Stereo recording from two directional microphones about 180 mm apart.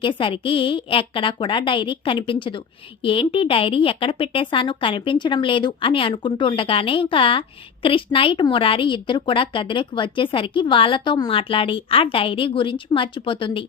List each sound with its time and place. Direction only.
0.0 s speech: 30° left (ahead or behind)